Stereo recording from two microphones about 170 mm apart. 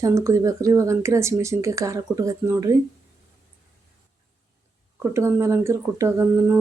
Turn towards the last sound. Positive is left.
turn(degrees=-15)  # may be behind; listen again after turning